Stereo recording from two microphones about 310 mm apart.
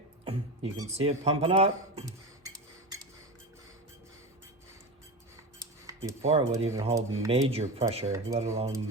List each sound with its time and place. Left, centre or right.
0.3 s speech: centre
5.5 s speech: centre